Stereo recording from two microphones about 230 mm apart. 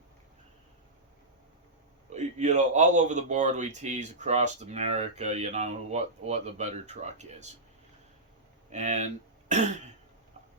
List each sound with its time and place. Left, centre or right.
2.1 s speech: right
8.7 s speech: right